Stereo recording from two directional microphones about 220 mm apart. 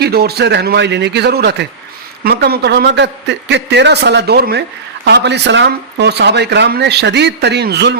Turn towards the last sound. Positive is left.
turn(degrees=-50)  # may be behind; listen again after turning